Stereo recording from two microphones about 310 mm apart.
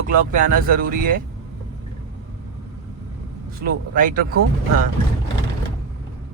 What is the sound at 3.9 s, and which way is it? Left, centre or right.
Speech, right.